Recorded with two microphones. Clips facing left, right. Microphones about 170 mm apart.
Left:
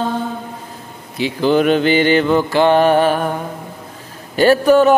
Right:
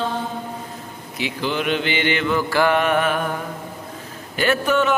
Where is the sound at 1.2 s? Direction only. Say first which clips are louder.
Left 10 dB; 35° left (ahead or behind).